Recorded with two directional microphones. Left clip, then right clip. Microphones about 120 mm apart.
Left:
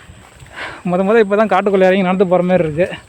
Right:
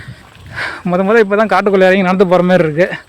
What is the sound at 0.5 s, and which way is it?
Speech, 25° right (ahead or behind).